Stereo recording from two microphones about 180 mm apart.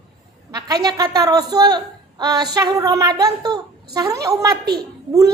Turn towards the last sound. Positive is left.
turn(degrees=-20)  # may be behind; listen again after turning